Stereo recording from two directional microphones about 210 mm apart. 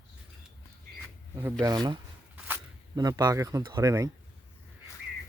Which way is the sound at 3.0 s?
20° right (ahead or behind).